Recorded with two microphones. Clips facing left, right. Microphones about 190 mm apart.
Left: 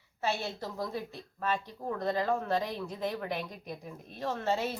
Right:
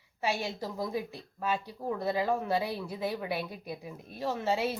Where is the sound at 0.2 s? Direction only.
10° right (ahead or behind).